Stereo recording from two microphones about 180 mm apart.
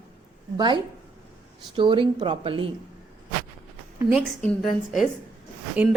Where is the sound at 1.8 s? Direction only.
30° right (ahead or behind).